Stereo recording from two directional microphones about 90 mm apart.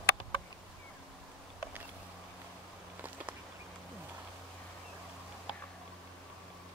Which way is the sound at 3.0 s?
20° right (ahead or behind).